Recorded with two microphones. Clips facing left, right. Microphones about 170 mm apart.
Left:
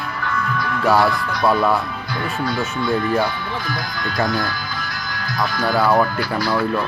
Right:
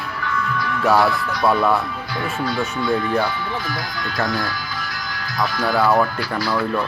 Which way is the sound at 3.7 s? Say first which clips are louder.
Left 1 dB; 55° left (ahead or behind).